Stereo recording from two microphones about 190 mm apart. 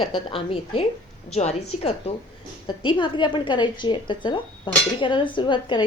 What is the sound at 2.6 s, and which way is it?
A woman's voice, 25° left (ahead or behind).